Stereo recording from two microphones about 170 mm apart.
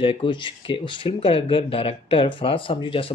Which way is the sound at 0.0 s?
30° left (ahead or behind).